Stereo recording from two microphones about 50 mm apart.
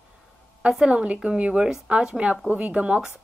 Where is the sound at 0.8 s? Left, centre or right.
Right.